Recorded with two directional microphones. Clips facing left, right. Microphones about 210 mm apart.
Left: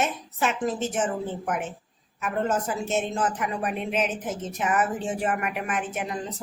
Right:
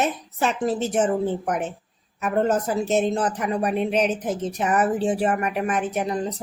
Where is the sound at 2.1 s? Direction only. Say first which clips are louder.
Right 5 dB; 40° right (ahead or behind).